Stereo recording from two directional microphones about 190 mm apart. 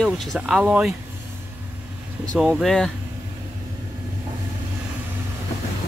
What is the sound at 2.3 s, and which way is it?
Speech, centre (ahead or behind).